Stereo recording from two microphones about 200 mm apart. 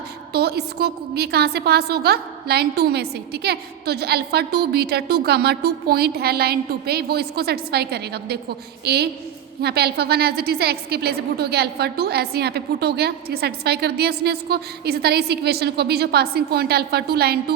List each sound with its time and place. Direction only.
0.3 s a woman's voice: 50° right (ahead or behind)